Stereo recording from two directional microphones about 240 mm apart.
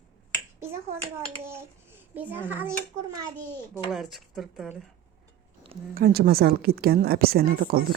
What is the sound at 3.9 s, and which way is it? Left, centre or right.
Speech, centre.